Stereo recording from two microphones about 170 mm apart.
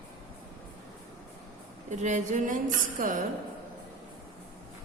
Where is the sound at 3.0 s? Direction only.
55° right (ahead or behind).